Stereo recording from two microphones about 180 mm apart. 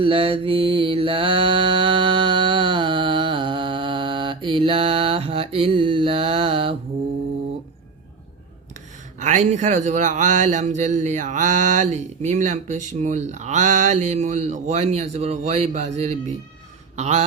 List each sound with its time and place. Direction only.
0.0 s mantra: 30° right (ahead or behind)
9.1 s a man's voice: 40° right (ahead or behind)